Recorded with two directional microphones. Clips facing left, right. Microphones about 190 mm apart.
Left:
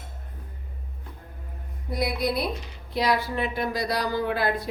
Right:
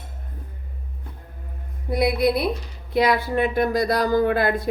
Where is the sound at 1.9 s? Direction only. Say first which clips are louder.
Right 7 dB; 60° right (ahead or behind).